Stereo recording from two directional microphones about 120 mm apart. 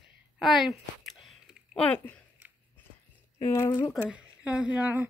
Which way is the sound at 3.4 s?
25° left (ahead or behind).